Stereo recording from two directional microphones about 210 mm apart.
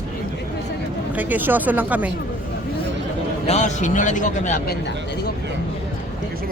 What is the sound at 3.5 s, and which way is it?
Speech, 35° left (ahead or behind).